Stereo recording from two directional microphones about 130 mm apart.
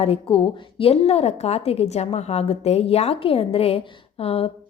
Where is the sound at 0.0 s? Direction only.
45° left (ahead or behind).